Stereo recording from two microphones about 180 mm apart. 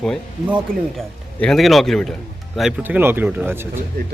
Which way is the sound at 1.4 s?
Centre (ahead or behind).